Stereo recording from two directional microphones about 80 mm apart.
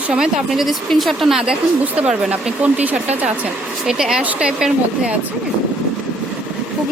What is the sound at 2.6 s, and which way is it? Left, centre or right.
Speech, centre.